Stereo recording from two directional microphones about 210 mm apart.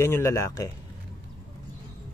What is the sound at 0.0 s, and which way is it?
Speech, 10° left (ahead or behind).